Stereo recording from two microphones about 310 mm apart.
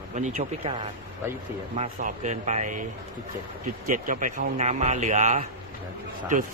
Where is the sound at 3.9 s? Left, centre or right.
Right.